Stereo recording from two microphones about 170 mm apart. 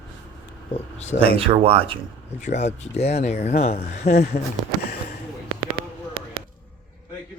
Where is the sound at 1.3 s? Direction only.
35° right (ahead or behind).